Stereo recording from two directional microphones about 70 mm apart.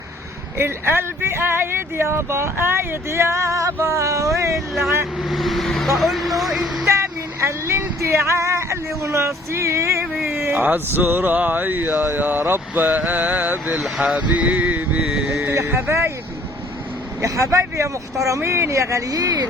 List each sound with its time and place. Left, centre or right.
0.6 s speech: right
5.2 s speech: centre
6.8 s speech: right
10.2 s a sound: right
10.5 s speech: right
15.0 s a sound: centre
15.4 s speech: right
17.2 s speech: right